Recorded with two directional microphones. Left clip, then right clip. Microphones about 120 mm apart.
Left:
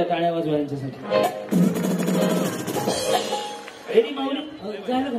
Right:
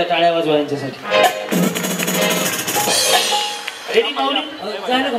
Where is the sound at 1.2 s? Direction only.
30° right (ahead or behind).